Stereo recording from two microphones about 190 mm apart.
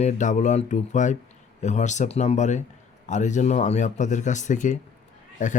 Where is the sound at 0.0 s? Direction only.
40° left (ahead or behind).